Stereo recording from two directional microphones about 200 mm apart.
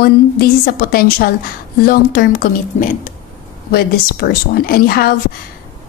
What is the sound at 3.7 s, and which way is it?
A woman's voice, 50° left (ahead or behind).